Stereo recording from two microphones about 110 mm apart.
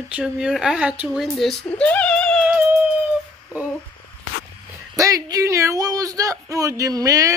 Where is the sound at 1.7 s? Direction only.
10° left (ahead or behind).